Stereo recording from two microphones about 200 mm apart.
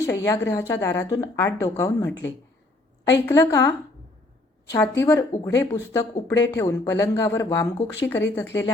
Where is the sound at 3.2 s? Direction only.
15° left (ahead or behind).